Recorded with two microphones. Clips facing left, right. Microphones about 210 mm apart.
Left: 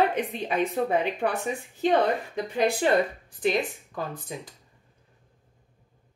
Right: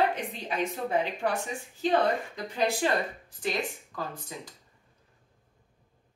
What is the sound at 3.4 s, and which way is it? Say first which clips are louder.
Speech: left 6 dB; 20° left (ahead or behind).